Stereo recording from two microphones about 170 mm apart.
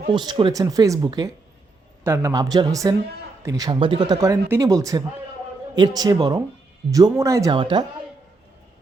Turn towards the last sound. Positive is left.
turn(degrees=-30)  # may be behind; listen again after turning